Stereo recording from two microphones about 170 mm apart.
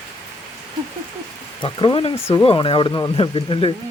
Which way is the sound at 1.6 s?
30° left (ahead or behind).